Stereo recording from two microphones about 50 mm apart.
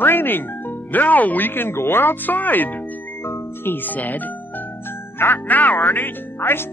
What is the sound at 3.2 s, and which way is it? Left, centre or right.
Music, left.